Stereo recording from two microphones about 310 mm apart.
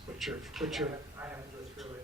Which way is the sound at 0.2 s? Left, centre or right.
Centre.